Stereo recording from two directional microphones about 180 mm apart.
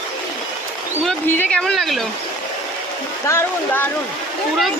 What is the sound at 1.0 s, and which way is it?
Speech, 5° left (ahead or behind).